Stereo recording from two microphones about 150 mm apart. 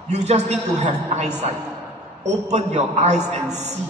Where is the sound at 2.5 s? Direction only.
45° right (ahead or behind).